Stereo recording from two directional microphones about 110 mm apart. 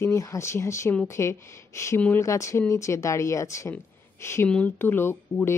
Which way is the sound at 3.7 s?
20° left (ahead or behind).